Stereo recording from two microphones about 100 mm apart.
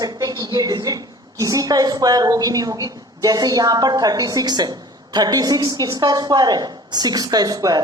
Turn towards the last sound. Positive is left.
turn(degrees=-40)  # may be behind; listen again after turning